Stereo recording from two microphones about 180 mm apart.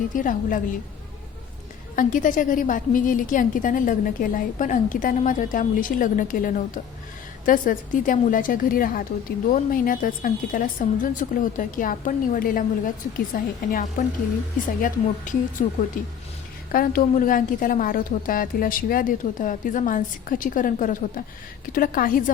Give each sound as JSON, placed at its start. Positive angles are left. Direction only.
{"t": 0.1, "sound": "a woman's voice", "side_deg": 45}
{"t": 2.0, "sound": "a woman's voice", "side_deg": 50}